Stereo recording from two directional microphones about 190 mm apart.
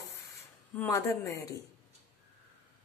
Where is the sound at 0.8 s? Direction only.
15° left (ahead or behind).